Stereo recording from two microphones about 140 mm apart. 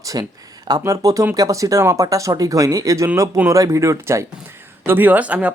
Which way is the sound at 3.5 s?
25° right (ahead or behind).